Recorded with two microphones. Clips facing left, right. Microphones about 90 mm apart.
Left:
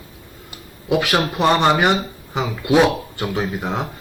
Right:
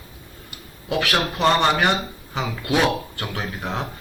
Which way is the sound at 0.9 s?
15° left (ahead or behind).